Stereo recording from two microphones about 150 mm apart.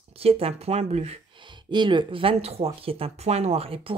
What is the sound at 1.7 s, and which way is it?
Speech, 30° right (ahead or behind).